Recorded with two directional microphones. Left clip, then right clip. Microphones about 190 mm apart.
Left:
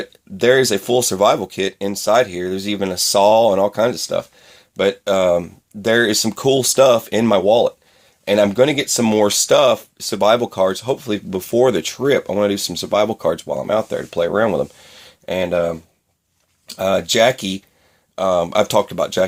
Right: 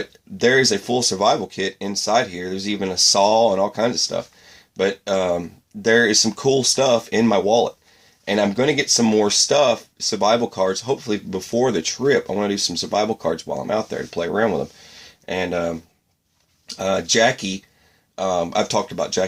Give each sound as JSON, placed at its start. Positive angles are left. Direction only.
{"t": 0.0, "sound": "speech", "side_deg": 40}